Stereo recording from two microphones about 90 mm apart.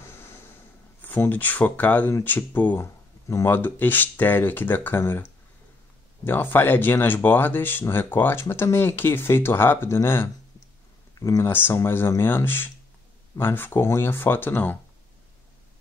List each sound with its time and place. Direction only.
1.0 s speech: 20° left (ahead or behind)
2.8 s a sound: 35° left (ahead or behind)
3.5 s speech: 20° left (ahead or behind)
6.2 s speech: 20° left (ahead or behind)
11.1 s speech: 35° left (ahead or behind)
11.5 s speech: 25° left (ahead or behind)